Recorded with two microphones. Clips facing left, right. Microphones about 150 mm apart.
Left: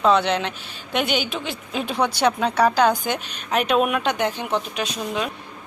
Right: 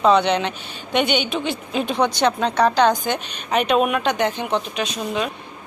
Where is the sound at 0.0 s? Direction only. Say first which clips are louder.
Right 2 dB; centre (ahead or behind).